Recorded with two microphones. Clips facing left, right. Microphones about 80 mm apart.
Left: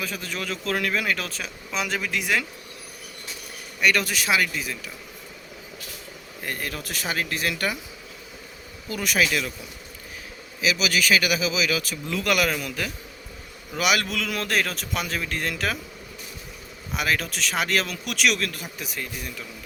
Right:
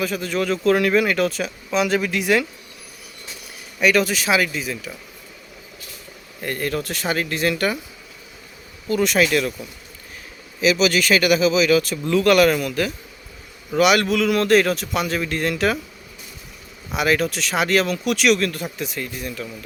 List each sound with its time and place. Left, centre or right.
0.0 s speech: centre
3.8 s speech: centre
6.4 s speech: centre
8.9 s speech: centre
10.6 s speech: centre
16.9 s speech: centre